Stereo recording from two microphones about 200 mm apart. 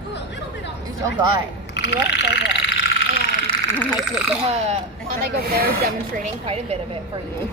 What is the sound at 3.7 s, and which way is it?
Speech, 5° left (ahead or behind).